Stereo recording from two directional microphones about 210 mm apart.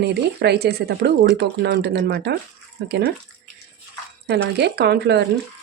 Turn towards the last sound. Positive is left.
turn(degrees=-50)  # may be behind; listen again after turning